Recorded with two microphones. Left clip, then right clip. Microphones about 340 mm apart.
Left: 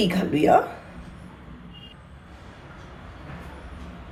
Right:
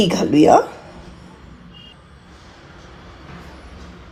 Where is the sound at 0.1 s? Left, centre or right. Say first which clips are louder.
Right 7 dB; right.